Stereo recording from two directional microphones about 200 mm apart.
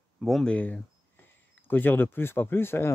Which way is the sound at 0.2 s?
Centre (ahead or behind).